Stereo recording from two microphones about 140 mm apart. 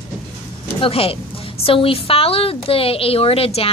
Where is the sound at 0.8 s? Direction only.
40° left (ahead or behind).